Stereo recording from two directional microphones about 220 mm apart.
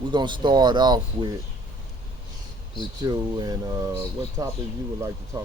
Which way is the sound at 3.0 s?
15° right (ahead or behind).